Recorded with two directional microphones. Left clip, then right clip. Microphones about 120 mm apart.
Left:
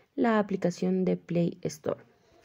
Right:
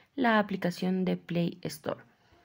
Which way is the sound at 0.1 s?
35° left (ahead or behind).